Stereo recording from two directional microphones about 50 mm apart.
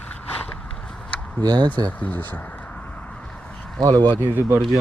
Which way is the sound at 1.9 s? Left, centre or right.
Left.